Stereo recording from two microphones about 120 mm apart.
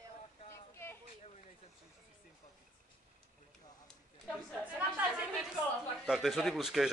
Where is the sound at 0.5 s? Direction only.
20° left (ahead or behind).